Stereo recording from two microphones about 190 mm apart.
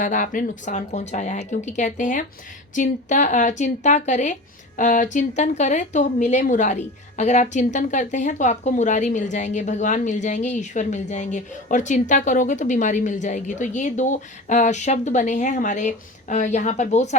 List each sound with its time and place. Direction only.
0.0 s a woman's voice: 40° left (ahead or behind)